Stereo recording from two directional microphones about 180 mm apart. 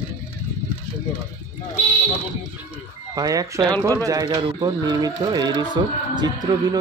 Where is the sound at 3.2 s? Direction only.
20° right (ahead or behind).